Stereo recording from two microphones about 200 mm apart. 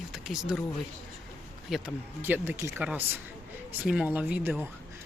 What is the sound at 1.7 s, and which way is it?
Speech, 5° right (ahead or behind).